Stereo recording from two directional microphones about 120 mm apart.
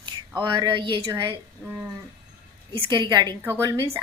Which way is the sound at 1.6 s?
15° right (ahead or behind).